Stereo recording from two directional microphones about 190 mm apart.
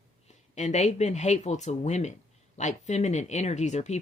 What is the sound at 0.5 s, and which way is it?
Speech, 40° left (ahead or behind).